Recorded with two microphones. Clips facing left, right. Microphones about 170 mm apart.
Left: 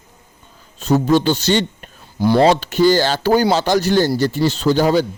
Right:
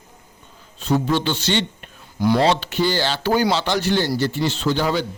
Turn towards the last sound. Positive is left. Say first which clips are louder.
# left 6 dB
turn(degrees=40)  # may be behind; listen again after turning